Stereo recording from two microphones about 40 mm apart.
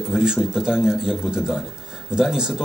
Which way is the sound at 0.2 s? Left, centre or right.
Centre.